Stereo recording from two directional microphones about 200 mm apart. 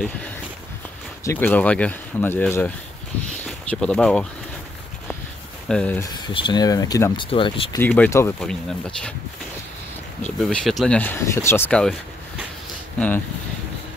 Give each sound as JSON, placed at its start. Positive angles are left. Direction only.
{"t": 1.2, "sound": "speech", "side_deg": 10}
{"t": 3.4, "sound": "a sound", "side_deg": 5}
{"t": 5.7, "sound": "speech", "side_deg": 5}
{"t": 6.2, "sound": "speech", "side_deg": 25}
{"t": 7.7, "sound": "speech", "side_deg": 10}
{"t": 10.2, "sound": "speech", "side_deg": 5}